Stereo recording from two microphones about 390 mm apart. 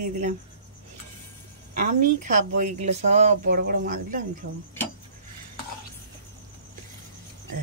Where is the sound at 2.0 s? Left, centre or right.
Centre.